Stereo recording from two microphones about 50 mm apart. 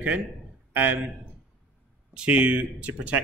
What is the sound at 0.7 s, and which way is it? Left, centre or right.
Speech, right.